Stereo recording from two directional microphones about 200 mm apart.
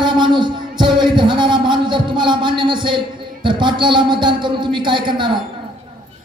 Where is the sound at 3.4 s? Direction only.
25° right (ahead or behind).